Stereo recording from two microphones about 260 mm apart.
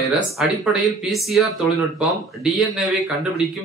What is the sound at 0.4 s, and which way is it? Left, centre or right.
A man's voice, centre.